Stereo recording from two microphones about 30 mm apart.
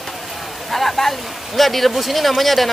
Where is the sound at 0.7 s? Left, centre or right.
Centre.